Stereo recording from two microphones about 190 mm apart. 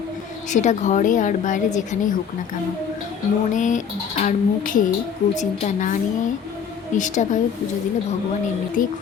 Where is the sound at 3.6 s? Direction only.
40° left (ahead or behind).